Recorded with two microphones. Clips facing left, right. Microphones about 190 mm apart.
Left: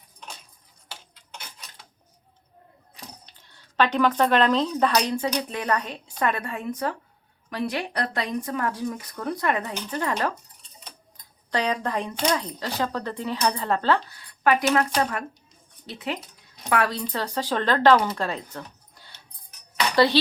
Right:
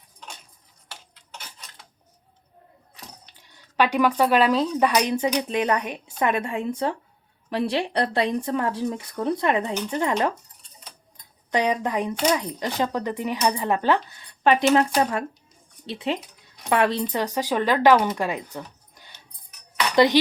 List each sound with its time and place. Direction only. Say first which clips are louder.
3.3 s speech: right 1 dB; 15° right (ahead or behind)
11.5 s speech: right 3 dB; 20° right (ahead or behind)
15.9 s speech: right 4 dB; 25° right (ahead or behind)